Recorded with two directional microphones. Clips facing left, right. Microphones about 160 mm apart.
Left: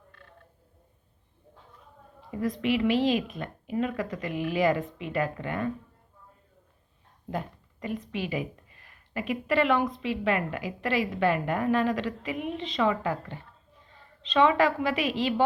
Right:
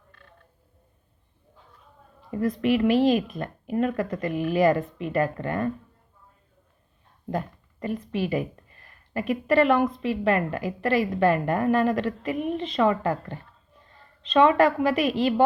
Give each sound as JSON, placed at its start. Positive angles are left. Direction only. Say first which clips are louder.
{"t": 2.3, "sound": "speech", "louder": "right 4 dB", "side_deg": -50}
{"t": 7.3, "sound": "speech", "louder": "right 4 dB", "side_deg": -45}